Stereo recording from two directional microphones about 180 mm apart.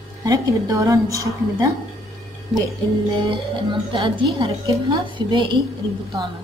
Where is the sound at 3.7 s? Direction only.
25° right (ahead or behind).